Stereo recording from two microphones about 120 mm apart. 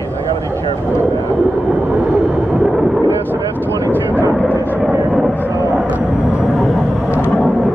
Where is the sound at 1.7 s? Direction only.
5° right (ahead or behind).